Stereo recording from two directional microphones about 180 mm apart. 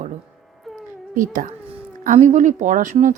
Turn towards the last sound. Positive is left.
turn(degrees=-45)  # may be behind; listen again after turning